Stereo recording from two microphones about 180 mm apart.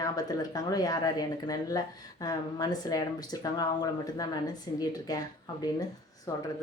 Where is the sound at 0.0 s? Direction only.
20° left (ahead or behind).